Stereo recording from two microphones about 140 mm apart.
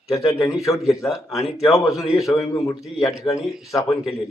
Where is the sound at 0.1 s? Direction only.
20° left (ahead or behind).